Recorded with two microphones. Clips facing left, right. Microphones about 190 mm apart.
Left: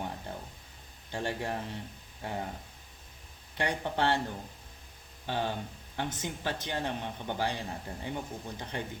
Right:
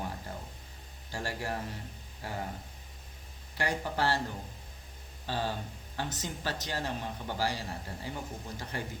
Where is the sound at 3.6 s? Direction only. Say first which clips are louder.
Left 1 dB; 20° left (ahead or behind).